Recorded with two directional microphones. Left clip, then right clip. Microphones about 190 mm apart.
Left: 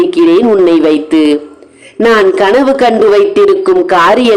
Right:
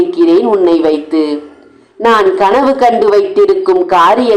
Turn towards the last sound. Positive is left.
turn(degrees=35)  # may be behind; listen again after turning